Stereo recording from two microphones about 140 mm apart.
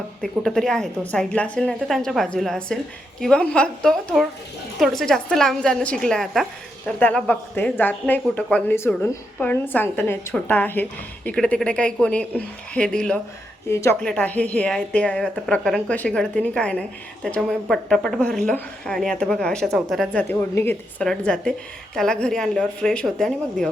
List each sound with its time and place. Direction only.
0.2 s a woman's voice: centre (ahead or behind)
13.7 s a woman's voice: 20° left (ahead or behind)
14.0 s a woman's voice: 10° left (ahead or behind)